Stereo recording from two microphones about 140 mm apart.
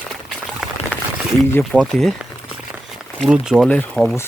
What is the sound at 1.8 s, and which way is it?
Speech, centre (ahead or behind).